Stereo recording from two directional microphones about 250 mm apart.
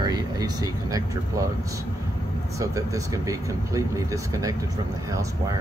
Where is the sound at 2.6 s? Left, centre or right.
Centre.